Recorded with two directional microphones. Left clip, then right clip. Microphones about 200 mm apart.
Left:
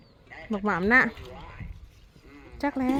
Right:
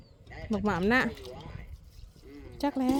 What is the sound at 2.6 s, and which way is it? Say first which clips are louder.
Speech: left 2 dB; 15° right (ahead or behind).